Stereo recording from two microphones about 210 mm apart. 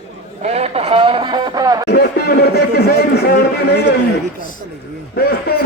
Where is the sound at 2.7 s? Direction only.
50° left (ahead or behind).